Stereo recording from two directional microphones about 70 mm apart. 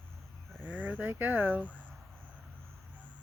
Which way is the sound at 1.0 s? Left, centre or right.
Right.